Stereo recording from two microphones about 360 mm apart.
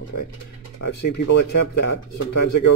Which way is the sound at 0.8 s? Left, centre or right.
Left.